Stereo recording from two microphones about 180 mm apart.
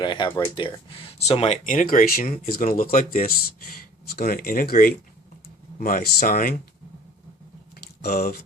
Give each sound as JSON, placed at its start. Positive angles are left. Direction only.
{"t": 0.0, "sound": "speech", "side_deg": 25}
{"t": 8.0, "sound": "speech", "side_deg": 60}